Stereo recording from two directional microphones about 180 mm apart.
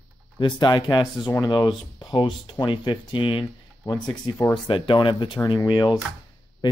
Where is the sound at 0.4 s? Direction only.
20° left (ahead or behind).